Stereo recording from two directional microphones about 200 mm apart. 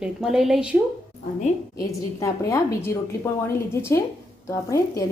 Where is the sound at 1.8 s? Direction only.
15° left (ahead or behind).